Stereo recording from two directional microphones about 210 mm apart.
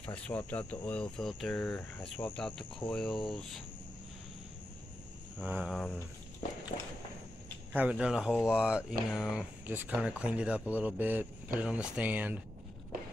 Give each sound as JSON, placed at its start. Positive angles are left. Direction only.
{"t": 0.0, "sound": "speech", "side_deg": 5}
{"t": 5.4, "sound": "speech", "side_deg": -10}
{"t": 5.7, "sound": "speech", "side_deg": 5}
{"t": 6.7, "sound": "walk", "side_deg": 35}
{"t": 7.7, "sound": "speech", "side_deg": -5}